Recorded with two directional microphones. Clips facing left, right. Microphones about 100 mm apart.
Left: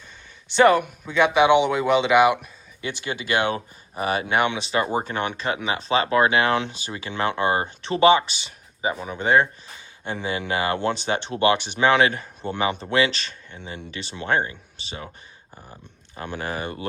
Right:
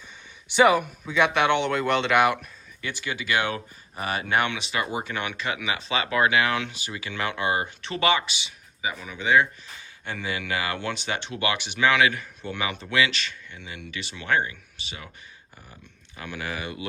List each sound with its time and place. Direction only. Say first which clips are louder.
0.4 s speech: left 3 dB; 5° right (ahead or behind); by 2.5 s 10° left (ahead or behind)
2.8 s speech: left 2 dB; 25° left (ahead or behind); by 9.5 s 40° left (ahead or behind)
10.0 s speech: left 4 dB; 25° left (ahead or behind)